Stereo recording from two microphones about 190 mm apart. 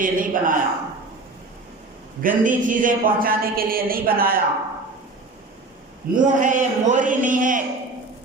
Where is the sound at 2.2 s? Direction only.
45° right (ahead or behind).